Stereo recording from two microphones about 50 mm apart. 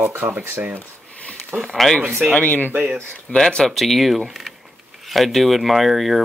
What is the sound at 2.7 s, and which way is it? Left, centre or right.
Speech, right.